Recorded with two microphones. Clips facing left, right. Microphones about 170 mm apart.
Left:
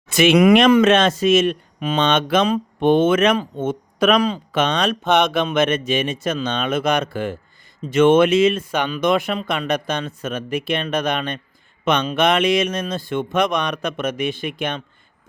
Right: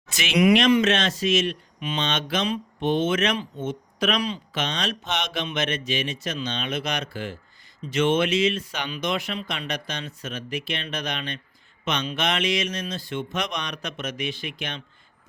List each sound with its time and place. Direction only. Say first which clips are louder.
0.1 s speech: left 7 dB; 55° left (ahead or behind)